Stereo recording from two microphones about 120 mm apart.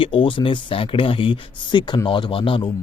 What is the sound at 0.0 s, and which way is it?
Speech, 45° left (ahead or behind).